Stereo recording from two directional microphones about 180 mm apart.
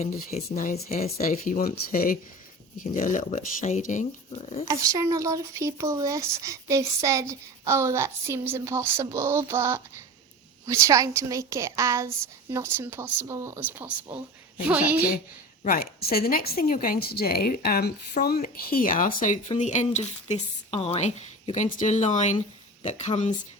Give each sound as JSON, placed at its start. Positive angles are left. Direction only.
{"t": 0.3, "sound": "speech", "side_deg": 40}
{"t": 4.7, "sound": "speech", "side_deg": -20}
{"t": 15.6, "sound": "speech", "side_deg": 55}